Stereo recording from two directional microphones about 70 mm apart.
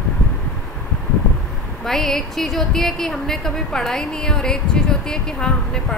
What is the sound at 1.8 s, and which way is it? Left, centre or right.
A woman's voice, centre.